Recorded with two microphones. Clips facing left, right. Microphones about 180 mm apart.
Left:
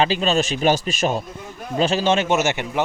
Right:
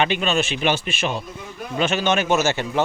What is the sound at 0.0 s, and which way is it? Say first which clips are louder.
A man's voice: left 2 dB; 30° left (ahead or behind).